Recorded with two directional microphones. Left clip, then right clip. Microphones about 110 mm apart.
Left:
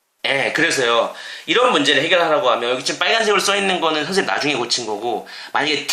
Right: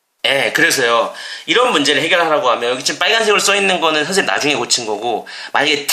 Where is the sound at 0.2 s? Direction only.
30° right (ahead or behind).